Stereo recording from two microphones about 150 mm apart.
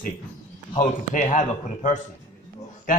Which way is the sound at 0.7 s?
55° left (ahead or behind).